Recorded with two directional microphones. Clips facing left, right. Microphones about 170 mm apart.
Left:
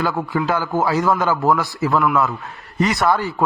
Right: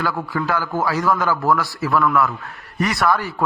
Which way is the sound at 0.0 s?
20° left (ahead or behind).